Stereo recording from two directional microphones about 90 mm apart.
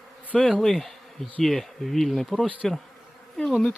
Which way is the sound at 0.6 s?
5° left (ahead or behind).